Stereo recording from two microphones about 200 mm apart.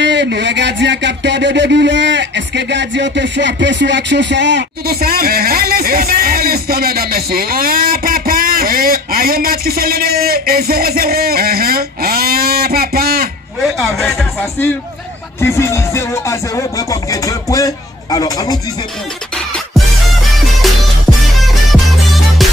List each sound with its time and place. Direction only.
0.0 s a sound: 60° right (ahead or behind)
13.6 s speech: centre (ahead or behind)
15.4 s music: 15° left (ahead or behind)
20.6 s music: centre (ahead or behind)